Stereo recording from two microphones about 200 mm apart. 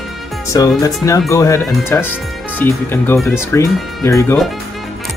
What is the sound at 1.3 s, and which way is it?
Speech, 15° left (ahead or behind).